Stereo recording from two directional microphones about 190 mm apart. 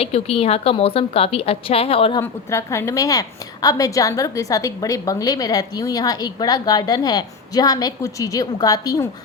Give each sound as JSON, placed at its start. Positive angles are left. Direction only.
{"t": 0.0, "sound": "a woman's voice", "side_deg": 30}
{"t": 2.2, "sound": "a woman's voice", "side_deg": 15}